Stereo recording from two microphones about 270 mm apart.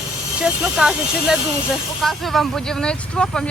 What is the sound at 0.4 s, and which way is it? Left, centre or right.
Speech, centre.